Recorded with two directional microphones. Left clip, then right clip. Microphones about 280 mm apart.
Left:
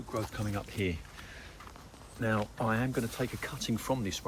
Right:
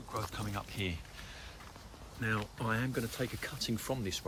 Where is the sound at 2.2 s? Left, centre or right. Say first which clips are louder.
Left 4 dB; centre.